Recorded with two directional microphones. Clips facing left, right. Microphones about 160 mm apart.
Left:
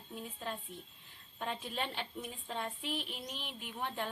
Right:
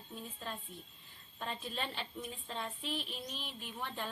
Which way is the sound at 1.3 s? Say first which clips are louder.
Left 2 dB; 15° left (ahead or behind).